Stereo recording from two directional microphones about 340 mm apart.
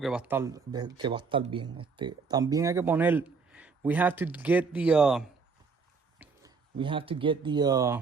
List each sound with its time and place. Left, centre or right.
0.0 s speech: centre